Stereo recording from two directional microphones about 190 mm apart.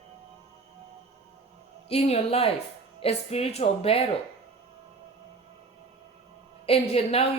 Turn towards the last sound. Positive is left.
turn(degrees=30)  # may be behind; listen again after turning